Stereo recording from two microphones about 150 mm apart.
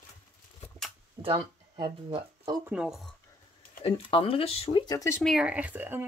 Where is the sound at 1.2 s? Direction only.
30° right (ahead or behind).